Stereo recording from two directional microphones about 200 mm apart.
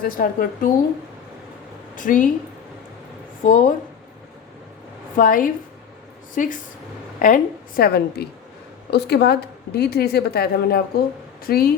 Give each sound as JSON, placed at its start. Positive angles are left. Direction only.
{"t": 0.0, "sound": "a woman's voice", "side_deg": 45}
{"t": 2.0, "sound": "a woman's voice", "side_deg": 40}
{"t": 3.4, "sound": "a woman's voice", "side_deg": 40}
{"t": 5.1, "sound": "a woman's voice", "side_deg": 45}